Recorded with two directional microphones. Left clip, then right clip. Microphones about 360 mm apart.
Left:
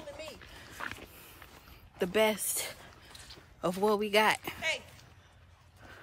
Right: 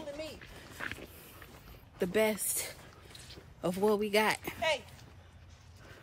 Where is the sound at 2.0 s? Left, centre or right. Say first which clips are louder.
Left 2 dB; centre.